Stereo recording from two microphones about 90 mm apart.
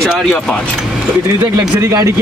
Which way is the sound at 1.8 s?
35° right (ahead or behind).